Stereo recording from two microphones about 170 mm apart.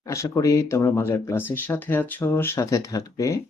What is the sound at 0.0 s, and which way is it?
Speech, 20° left (ahead or behind).